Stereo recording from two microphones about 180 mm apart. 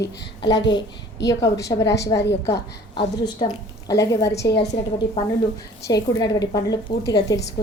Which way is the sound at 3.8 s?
20° left (ahead or behind).